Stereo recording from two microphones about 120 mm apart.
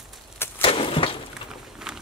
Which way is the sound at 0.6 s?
50° left (ahead or behind).